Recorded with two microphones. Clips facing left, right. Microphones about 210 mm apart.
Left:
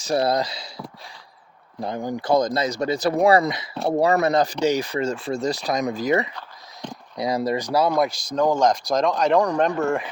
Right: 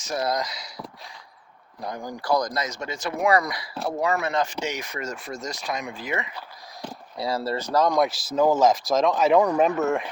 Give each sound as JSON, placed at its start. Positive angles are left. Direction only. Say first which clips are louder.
{"t": 0.0, "sound": "speech", "louder": "left 5 dB", "side_deg": 30}
{"t": 1.8, "sound": "speech", "louder": "left 6 dB", "side_deg": 25}
{"t": 3.8, "sound": "speech", "louder": "left 6 dB", "side_deg": 35}
{"t": 6.8, "sound": "a sound", "louder": "left 2 dB", "side_deg": -5}
{"t": 7.2, "sound": "speech", "louder": "left 4 dB", "side_deg": 15}